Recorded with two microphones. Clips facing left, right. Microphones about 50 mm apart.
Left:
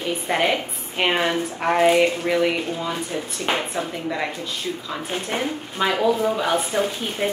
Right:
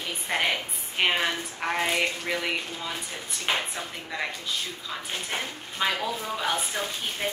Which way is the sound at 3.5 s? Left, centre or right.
Left.